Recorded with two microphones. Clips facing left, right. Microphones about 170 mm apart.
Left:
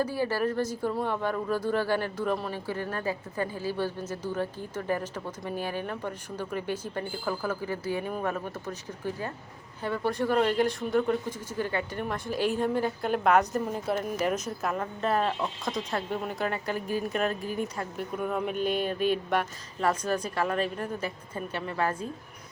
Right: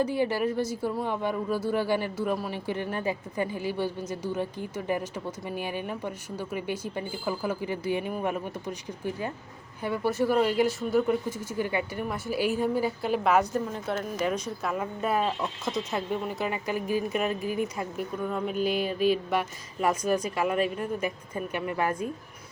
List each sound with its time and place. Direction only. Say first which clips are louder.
0.0 s speech: right 2 dB; 20° right (ahead or behind)
18.2 s speech: even; 10° left (ahead or behind); by 22.1 s 15° right (ahead or behind)